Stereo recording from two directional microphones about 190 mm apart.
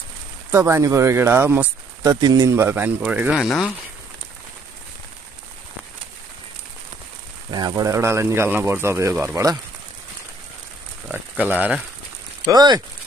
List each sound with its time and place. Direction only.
0.5 s speech: 15° right (ahead or behind); by 3.7 s centre (ahead or behind)
7.5 s speech: 20° right (ahead or behind)
11.1 s speech: 10° right (ahead or behind)
12.4 s speech: 20° right (ahead or behind)